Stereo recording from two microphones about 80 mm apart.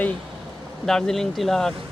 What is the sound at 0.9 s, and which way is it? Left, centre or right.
Speech, centre.